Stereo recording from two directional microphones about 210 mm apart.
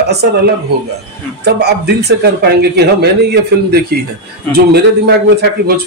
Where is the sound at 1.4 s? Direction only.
50° right (ahead or behind).